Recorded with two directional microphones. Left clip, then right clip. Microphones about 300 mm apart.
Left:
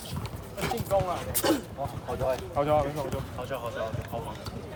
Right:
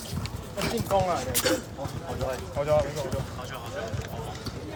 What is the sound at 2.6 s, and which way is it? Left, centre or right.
Speech, left.